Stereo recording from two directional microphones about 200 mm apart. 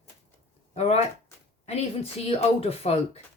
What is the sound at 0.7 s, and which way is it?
Speech, 30° left (ahead or behind).